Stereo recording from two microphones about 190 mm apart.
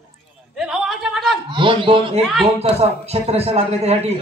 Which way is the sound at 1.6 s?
25° right (ahead or behind).